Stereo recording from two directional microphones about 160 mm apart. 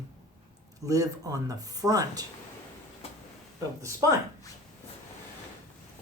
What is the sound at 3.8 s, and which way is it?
Speech, 20° right (ahead or behind).